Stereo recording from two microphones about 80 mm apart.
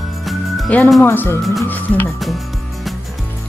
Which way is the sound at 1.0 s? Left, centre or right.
Left.